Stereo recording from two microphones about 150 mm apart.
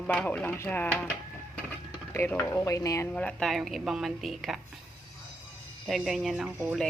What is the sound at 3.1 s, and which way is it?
A woman's voice, 5° left (ahead or behind).